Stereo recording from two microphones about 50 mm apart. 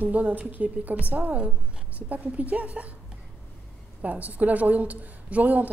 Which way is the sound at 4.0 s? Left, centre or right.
Right.